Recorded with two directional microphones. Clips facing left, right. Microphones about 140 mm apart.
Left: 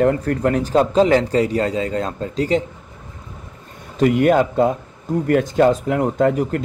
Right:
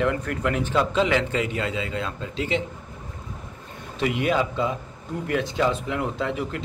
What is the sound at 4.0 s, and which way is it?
Speech, 45° left (ahead or behind).